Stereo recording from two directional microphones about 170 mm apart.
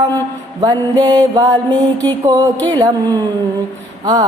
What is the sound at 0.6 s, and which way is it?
Music, 20° right (ahead or behind).